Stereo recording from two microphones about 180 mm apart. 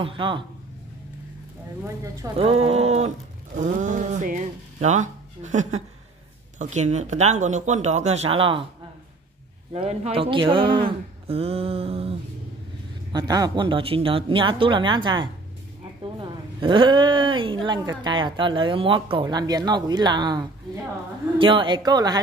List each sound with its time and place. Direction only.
0.0 s speech: 25° right (ahead or behind)
2.2 s speech: 15° right (ahead or behind)
2.6 s speech: 35° right (ahead or behind)
9.7 s speech: 35° right (ahead or behind)
13.1 s speech: 20° right (ahead or behind)